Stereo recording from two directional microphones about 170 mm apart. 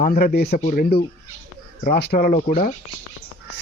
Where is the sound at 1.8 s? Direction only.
65° left (ahead or behind).